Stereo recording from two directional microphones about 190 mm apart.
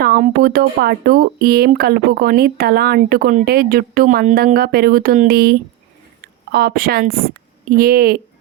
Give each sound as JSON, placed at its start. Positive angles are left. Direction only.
{"t": 0.0, "sound": "speech", "side_deg": -50}